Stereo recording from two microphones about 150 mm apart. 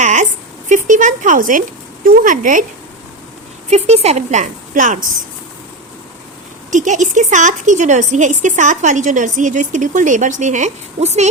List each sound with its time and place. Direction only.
0.0 s a sound: 55° right (ahead or behind)
0.7 s speech: 55° right (ahead or behind)
3.7 s a woman's voice: 45° right (ahead or behind)
6.7 s speech: 55° right (ahead or behind)